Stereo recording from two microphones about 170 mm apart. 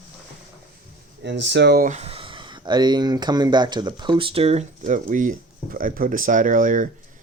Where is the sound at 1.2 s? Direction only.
90° right.